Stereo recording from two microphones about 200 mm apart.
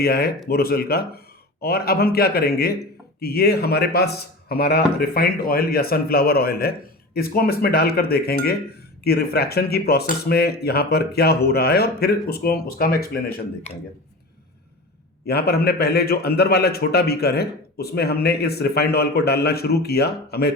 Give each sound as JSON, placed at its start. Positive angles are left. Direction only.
{"t": 0.0, "sound": "speech", "side_deg": 50}
{"t": 13.7, "sound": "speech", "side_deg": 30}
{"t": 15.3, "sound": "speech", "side_deg": 50}